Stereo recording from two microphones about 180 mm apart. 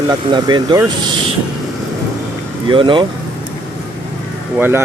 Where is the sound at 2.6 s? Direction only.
25° right (ahead or behind).